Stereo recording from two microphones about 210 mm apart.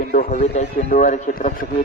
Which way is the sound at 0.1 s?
40° left (ahead or behind).